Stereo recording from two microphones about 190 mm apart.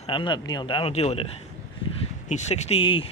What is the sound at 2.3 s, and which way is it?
Speech, 35° left (ahead or behind).